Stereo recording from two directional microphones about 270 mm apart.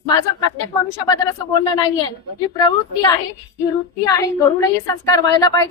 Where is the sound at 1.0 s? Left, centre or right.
Centre.